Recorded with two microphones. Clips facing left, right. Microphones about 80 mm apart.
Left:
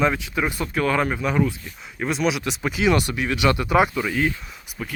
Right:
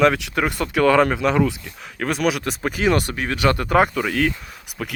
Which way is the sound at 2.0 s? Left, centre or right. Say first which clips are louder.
Right 2 dB; right.